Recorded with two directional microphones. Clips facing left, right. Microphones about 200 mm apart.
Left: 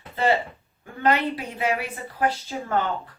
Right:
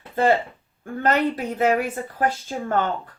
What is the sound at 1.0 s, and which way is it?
Speech, 45° right (ahead or behind).